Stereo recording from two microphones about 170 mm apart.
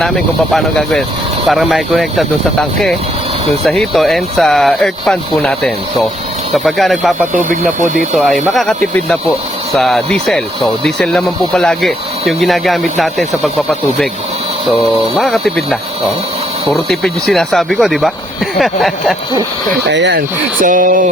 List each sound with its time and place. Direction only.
0.5 s speech: 5° left (ahead or behind)
7.5 s speech: 50° right (ahead or behind)
7.9 s speech: centre (ahead or behind)
9.7 s speech: centre (ahead or behind)
19.9 s speech: 85° right; by 21.0 s 50° right (ahead or behind)